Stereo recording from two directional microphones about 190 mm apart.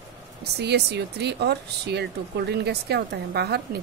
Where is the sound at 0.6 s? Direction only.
60° right (ahead or behind).